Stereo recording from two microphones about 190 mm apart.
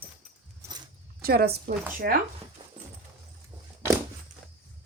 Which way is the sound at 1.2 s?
55° right (ahead or behind).